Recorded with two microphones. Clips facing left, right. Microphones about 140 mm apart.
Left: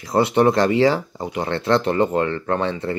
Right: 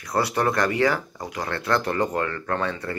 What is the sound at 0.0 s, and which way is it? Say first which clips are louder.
Speech: left 7 dB; 25° left (ahead or behind).